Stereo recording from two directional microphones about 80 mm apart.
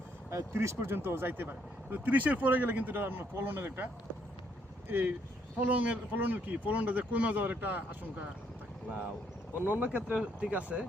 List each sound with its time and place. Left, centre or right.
0.3 s speech: right
4.9 s speech: right
9.6 s speech: right